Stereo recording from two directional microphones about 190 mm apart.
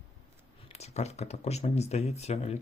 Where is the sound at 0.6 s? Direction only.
35° left (ahead or behind).